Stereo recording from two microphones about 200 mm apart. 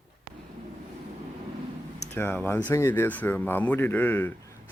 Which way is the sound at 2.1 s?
10° left (ahead or behind).